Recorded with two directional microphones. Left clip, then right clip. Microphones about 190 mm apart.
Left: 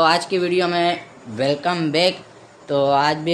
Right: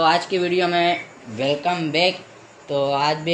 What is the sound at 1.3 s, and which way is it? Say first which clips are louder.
A man's voice: left 1 dB; 30° left (ahead or behind).